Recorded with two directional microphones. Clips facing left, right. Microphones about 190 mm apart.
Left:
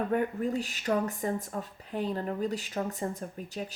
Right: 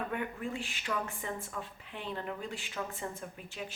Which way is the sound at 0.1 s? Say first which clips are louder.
Left 8 dB; 40° left (ahead or behind).